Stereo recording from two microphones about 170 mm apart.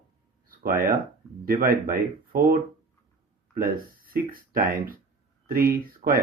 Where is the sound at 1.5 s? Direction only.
60° right (ahead or behind).